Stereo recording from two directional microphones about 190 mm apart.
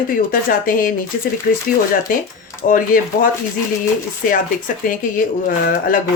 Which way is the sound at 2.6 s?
45° left (ahead or behind).